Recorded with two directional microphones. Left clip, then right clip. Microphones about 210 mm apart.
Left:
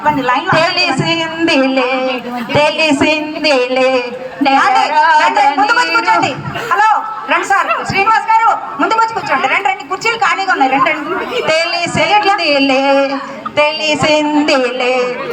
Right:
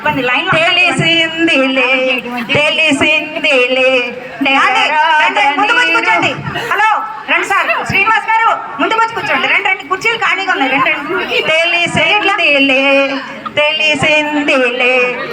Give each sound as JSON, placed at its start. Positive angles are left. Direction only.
{"t": 0.0, "sound": "speech", "side_deg": -30}